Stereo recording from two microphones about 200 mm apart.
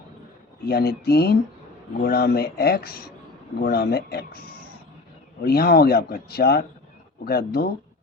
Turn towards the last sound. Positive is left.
turn(degrees=50)  # may be behind; listen again after turning